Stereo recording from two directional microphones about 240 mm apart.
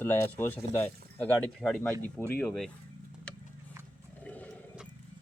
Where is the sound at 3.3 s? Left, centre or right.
Centre.